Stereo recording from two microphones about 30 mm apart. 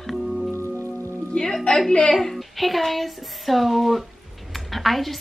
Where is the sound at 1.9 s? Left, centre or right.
Left.